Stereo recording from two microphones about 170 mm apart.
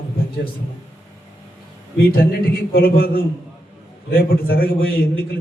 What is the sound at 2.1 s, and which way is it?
A man's voice, 60° left (ahead or behind).